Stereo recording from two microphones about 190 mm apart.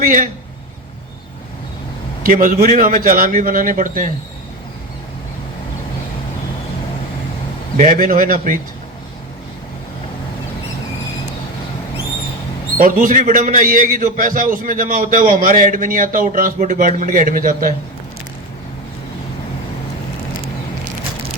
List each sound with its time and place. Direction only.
0.0 s a man's voice: 45° right (ahead or behind)
2.2 s a man's voice: 45° right (ahead or behind)
7.8 s a man's voice: 45° right (ahead or behind)
12.8 s a man's voice: 45° right (ahead or behind)